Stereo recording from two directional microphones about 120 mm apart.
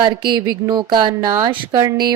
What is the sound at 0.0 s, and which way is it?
A woman's voice, 40° right (ahead or behind).